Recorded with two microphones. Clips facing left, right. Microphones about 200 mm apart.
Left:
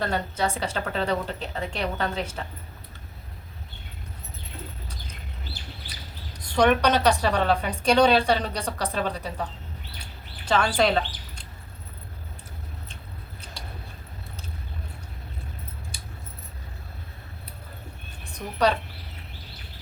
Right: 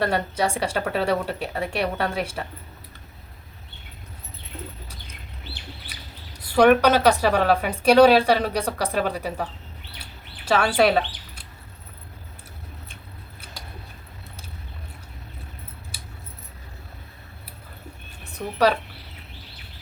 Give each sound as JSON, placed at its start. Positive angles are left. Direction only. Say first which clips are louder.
{"t": 0.0, "sound": "a woman's voice", "louder": "right 3 dB", "side_deg": -10}
{"t": 6.4, "sound": "a woman's voice", "louder": "right 5 dB", "side_deg": -5}
{"t": 10.0, "sound": "bird", "louder": "even", "side_deg": -5}